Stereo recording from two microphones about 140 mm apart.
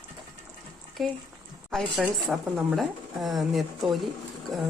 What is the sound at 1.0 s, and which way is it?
A woman's voice, centre (ahead or behind).